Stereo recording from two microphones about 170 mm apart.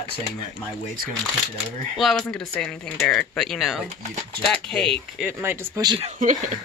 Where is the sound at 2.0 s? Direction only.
Centre (ahead or behind).